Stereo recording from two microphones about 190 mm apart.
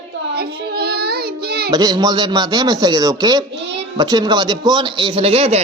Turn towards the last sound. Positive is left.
turn(degrees=-30)  # may be behind; listen again after turning